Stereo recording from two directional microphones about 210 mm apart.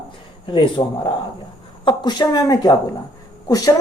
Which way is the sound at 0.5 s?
20° left (ahead or behind).